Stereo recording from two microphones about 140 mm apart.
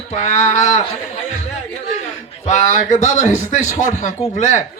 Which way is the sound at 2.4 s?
60° left (ahead or behind).